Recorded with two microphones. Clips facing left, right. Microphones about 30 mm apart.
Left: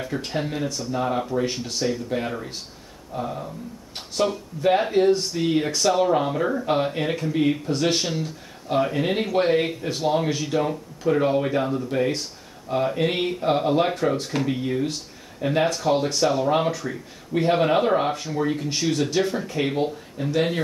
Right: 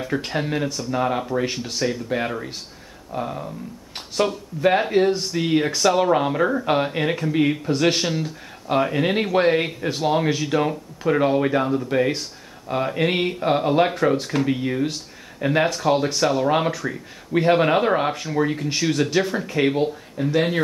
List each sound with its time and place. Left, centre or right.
0.2 s speech: centre
1.4 s speech: centre
2.1 s speech: right
7.7 s speech: centre